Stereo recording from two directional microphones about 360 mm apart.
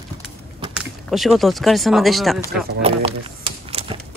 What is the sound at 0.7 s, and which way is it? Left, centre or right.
Speech, centre.